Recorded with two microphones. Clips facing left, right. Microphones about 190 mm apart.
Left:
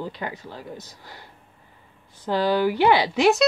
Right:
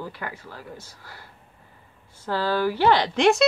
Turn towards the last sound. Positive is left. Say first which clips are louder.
# left 1 dB
turn(degrees=5)  # may be behind; listen again after turning